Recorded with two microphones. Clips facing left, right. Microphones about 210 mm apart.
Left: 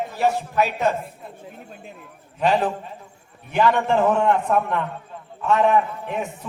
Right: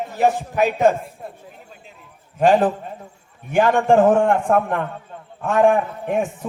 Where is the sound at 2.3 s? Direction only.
50° right (ahead or behind).